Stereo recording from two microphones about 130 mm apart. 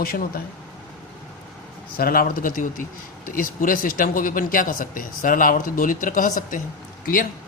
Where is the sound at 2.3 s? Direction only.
90° left.